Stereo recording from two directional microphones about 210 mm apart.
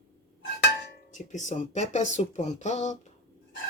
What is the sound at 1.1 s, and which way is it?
Speech, 35° left (ahead or behind).